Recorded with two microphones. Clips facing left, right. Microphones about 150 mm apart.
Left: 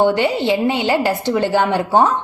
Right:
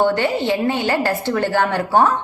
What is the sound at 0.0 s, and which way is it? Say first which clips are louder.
A woman's voice: left 2 dB; 15° left (ahead or behind).